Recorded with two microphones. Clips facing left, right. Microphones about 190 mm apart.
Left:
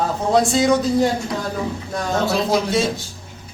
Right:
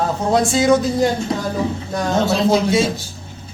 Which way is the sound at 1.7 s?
25° right (ahead or behind).